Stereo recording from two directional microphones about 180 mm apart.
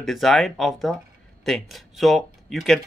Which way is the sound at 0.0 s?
Centre (ahead or behind).